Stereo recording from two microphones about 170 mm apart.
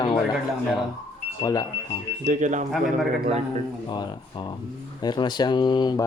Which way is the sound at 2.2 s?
45° right (ahead or behind).